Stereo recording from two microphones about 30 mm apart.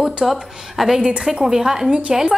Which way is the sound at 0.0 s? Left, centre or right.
Centre.